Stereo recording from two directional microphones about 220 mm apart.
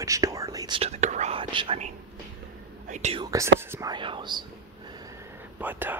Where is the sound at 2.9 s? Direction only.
30° right (ahead or behind).